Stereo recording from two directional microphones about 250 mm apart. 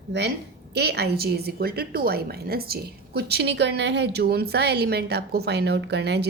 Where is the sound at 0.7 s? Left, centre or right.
Right.